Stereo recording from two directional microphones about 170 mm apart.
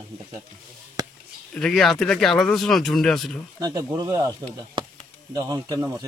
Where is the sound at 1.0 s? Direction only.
25° right (ahead or behind).